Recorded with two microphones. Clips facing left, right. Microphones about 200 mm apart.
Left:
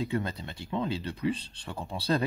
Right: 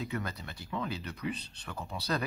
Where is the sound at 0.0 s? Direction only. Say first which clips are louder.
Left 6 dB; 25° left (ahead or behind).